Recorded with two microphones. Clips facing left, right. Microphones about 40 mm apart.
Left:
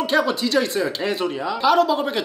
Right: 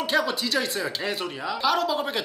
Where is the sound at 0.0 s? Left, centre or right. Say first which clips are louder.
Left 5 dB; centre.